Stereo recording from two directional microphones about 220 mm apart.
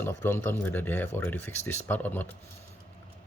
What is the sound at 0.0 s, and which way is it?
Speech, 10° left (ahead or behind).